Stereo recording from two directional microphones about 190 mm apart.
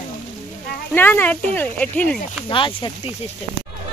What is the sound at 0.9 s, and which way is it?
Speech, 10° left (ahead or behind).